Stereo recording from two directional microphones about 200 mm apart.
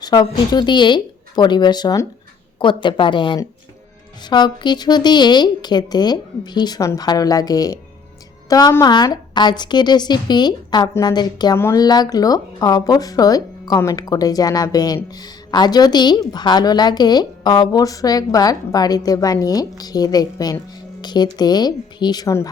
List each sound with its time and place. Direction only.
0.0 s a woman's voice: 20° left (ahead or behind)